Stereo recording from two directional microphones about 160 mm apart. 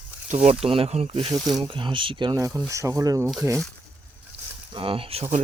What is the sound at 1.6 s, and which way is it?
Speech, 30° right (ahead or behind).